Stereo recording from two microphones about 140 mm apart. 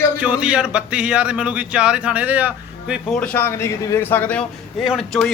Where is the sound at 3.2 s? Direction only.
10° left (ahead or behind).